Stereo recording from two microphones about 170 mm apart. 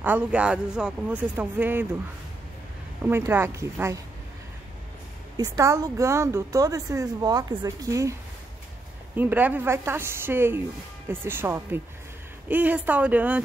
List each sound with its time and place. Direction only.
0.0 s speech: 10° right (ahead or behind)
3.1 s speech: 15° right (ahead or behind)
5.4 s a woman's voice: 20° right (ahead or behind)